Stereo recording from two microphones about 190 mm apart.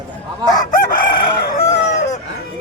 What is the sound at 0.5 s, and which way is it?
Chicken, 20° left (ahead or behind).